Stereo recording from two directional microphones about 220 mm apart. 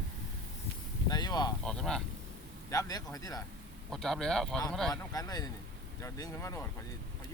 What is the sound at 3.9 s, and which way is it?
Speech, centre (ahead or behind).